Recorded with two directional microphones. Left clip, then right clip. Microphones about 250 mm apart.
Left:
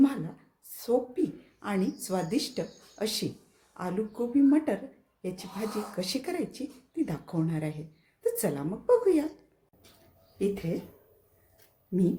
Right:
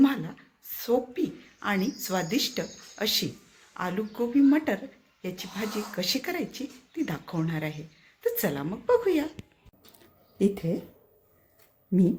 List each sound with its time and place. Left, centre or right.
0.0 s a sound: centre
0.8 s a woman's voice: centre
10.3 s speech: right